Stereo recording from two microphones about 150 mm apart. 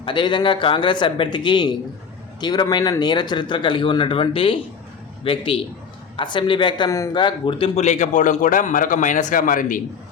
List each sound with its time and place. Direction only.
0.0 s speech: 30° left (ahead or behind)
7.8 s a man's voice: 50° left (ahead or behind)